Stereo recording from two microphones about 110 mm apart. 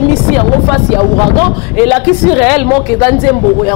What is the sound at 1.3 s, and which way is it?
Speech, 5° right (ahead or behind).